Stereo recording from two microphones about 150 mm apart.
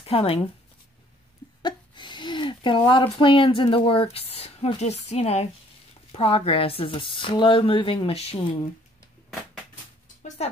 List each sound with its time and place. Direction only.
0.0 s speech: 40° left (ahead or behind)
1.6 s speech: 30° left (ahead or behind)
10.2 s music: 45° left (ahead or behind)